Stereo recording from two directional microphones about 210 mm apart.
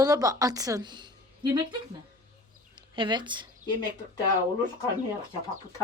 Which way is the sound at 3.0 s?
20° right (ahead or behind).